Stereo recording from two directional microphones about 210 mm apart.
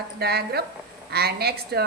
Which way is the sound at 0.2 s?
50° right (ahead or behind).